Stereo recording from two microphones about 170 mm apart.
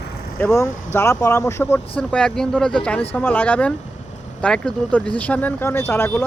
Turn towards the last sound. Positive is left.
turn(degrees=15)  # may be behind; listen again after turning